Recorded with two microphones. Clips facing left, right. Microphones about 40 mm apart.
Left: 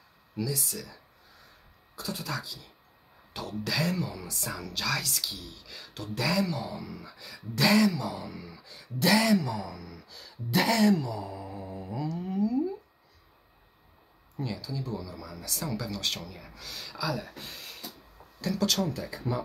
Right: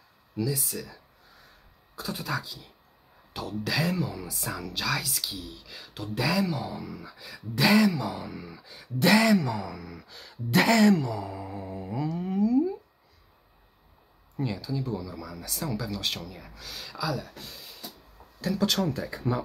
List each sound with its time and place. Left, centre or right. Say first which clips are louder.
0.5 s speech: right 3 dB; centre
2.0 s speech: right 3 dB; right
3.3 s speech: right 2 dB; centre
9.0 s speech: right 3 dB; right
10.5 s a sound: right 3 dB; right
14.3 s a sound: right 4 dB; right
14.6 s speech: right 4 dB; centre
18.4 s speech: right 2 dB; centre
18.8 s speech: right 2 dB; right